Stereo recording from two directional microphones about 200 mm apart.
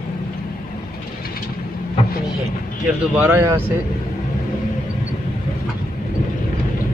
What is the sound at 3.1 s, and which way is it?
Speech, 10° right (ahead or behind).